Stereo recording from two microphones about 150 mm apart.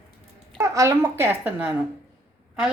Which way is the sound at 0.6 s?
20° right (ahead or behind).